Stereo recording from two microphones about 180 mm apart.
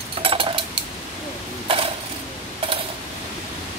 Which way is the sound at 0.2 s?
30° right (ahead or behind).